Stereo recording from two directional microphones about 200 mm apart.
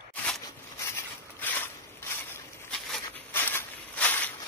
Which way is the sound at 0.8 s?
10° left (ahead or behind).